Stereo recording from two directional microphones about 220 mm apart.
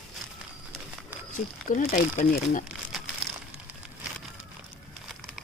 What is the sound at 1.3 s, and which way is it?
Speech, 35° left (ahead or behind).